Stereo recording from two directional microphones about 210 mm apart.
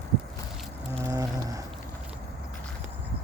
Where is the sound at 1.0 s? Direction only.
15° right (ahead or behind).